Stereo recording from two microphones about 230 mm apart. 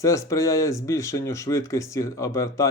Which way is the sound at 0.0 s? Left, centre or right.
Centre.